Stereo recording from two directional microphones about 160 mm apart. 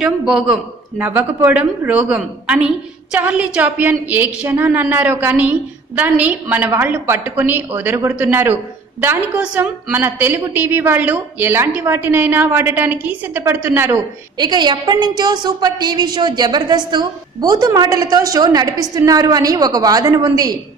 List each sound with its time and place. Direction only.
0.0 s a man's voice: 5° right (ahead or behind)
14.4 s a woman's voice: 25° right (ahead or behind)